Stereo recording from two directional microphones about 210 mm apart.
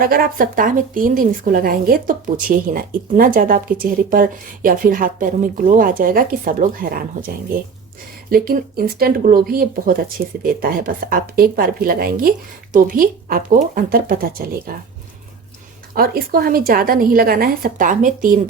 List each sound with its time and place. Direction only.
0.0 s speech: 45° right (ahead or behind)
8.3 s speech: 45° right (ahead or behind)
16.0 s speech: 45° right (ahead or behind)